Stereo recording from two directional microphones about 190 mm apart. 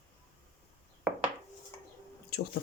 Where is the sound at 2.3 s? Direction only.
60° left (ahead or behind).